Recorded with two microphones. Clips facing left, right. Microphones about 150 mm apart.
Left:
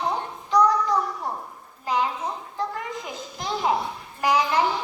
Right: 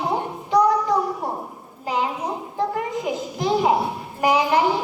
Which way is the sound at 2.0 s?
15° right (ahead or behind).